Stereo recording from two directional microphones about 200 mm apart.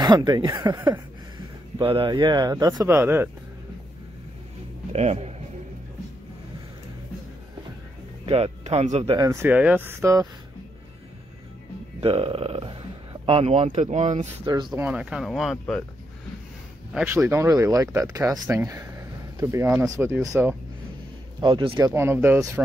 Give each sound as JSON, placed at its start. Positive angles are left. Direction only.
{"t": 0.0, "sound": "speech", "side_deg": -20}
{"t": 1.8, "sound": "speech", "side_deg": -25}
{"t": 4.9, "sound": "a man's voice", "side_deg": -35}
{"t": 8.3, "sound": "speech", "side_deg": -30}
{"t": 12.0, "sound": "speech", "side_deg": -25}
{"t": 14.4, "sound": "speech", "side_deg": -20}
{"t": 14.7, "sound": "speech", "side_deg": -5}
{"t": 16.9, "sound": "speech", "side_deg": -10}
{"t": 21.4, "sound": "speech", "side_deg": -25}
{"t": 21.7, "sound": "speech", "side_deg": -15}